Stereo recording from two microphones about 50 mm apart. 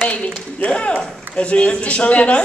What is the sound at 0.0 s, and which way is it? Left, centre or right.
Speech, left.